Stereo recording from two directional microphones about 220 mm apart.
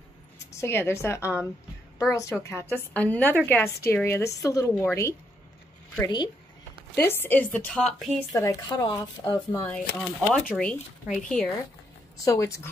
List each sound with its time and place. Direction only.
0.6 s a woman's voice: 10° left (ahead or behind)
8.4 s a woman's voice: 15° left (ahead or behind)
9.8 s speech: 5° left (ahead or behind)
12.3 s a woman's voice: 15° left (ahead or behind)